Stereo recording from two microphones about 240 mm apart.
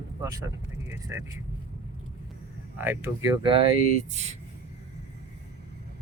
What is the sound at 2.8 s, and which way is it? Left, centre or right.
Speech, centre.